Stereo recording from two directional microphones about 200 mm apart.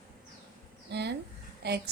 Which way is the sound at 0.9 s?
55° right (ahead or behind).